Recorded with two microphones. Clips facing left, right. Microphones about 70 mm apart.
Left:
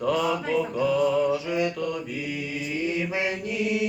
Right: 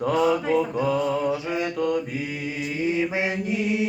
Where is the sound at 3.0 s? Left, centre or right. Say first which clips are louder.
Right 3 dB; right.